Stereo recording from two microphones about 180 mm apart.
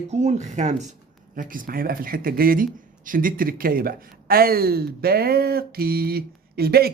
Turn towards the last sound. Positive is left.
turn(degrees=-60)  # may be behind; listen again after turning